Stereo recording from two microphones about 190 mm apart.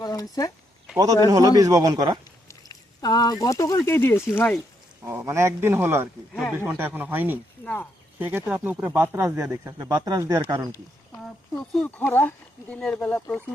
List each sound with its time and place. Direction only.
0.0 s a sound: 20° left (ahead or behind)
0.9 s speech: 20° right (ahead or behind)
2.5 s speech: 20° left (ahead or behind)
5.0 s speech: 15° right (ahead or behind)
7.6 s speech: 5° left (ahead or behind)
8.2 s speech: 10° right (ahead or behind)
11.5 s speech: 5° left (ahead or behind)